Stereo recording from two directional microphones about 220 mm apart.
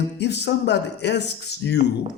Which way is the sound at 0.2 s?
50° left (ahead or behind).